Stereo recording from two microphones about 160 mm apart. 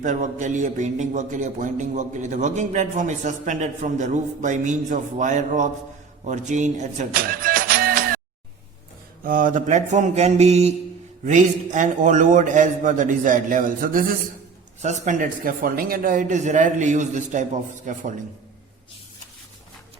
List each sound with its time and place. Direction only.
0.0 s a man's voice: 50° right (ahead or behind)
9.2 s a man's voice: 60° right (ahead or behind)
14.8 s a man's voice: 50° right (ahead or behind)